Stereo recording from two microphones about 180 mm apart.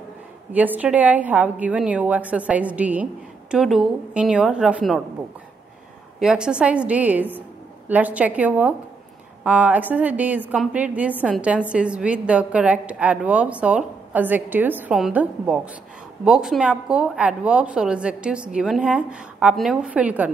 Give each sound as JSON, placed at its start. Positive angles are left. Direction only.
{"t": 0.5, "sound": "a woman's voice", "side_deg": -10}
{"t": 6.1, "sound": "a woman's voice", "side_deg": -5}